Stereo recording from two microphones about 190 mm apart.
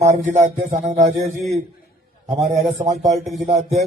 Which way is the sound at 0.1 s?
40° right (ahead or behind).